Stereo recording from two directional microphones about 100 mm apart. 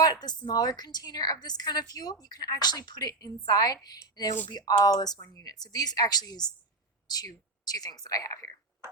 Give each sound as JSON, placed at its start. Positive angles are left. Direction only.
{"t": 0.0, "sound": "a woman's voice", "side_deg": 40}